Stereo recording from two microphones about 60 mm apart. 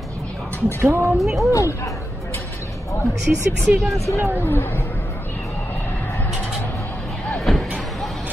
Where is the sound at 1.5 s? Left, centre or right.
Left.